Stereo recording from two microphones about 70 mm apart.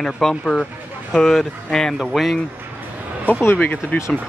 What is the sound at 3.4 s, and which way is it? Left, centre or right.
Speech, left.